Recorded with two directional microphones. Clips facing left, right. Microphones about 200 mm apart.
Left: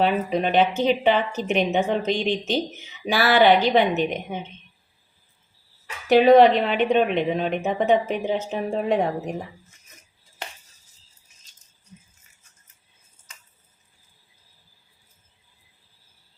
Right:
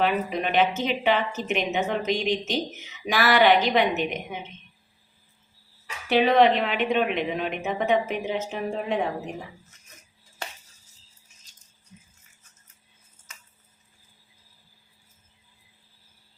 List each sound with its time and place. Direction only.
0.0 s a woman's voice: 35° left (ahead or behind)
6.1 s a woman's voice: 40° left (ahead or behind)